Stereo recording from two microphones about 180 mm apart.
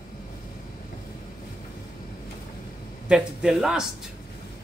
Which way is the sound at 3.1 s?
5° right (ahead or behind).